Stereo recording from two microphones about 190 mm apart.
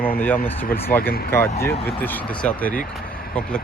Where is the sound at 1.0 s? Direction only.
50° left (ahead or behind).